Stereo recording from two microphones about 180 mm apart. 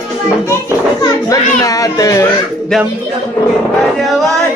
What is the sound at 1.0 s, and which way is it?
Children playing, 20° left (ahead or behind).